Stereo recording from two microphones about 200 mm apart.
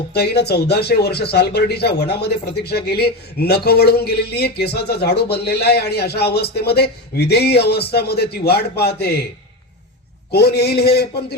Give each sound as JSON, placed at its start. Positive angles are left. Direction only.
{"t": 0.1, "sound": "speech", "side_deg": 55}
{"t": 10.3, "sound": "speech", "side_deg": 55}